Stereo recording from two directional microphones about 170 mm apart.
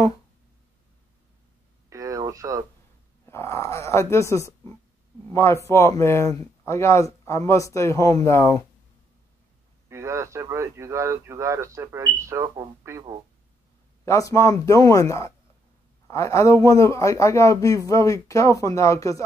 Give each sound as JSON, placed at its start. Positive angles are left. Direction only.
{"t": 1.9, "sound": "a sound", "side_deg": -20}
{"t": 3.3, "sound": "speech", "side_deg": 15}
{"t": 9.8, "sound": "speech", "side_deg": -15}
{"t": 14.0, "sound": "speech", "side_deg": 20}